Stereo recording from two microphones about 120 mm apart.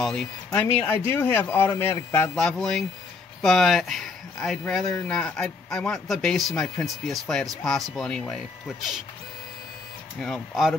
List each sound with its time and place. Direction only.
0.0 s speech: 5° left (ahead or behind)
0.5 s speech: 15° left (ahead or behind)
2.3 s speech: 5° left (ahead or behind)
10.1 s speech: centre (ahead or behind)